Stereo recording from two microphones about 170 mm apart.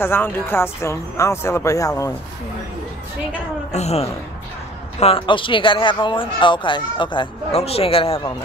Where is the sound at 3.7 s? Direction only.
40° left (ahead or behind).